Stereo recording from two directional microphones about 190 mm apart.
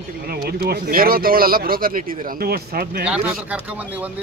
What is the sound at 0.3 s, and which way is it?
Speech, 55° right (ahead or behind).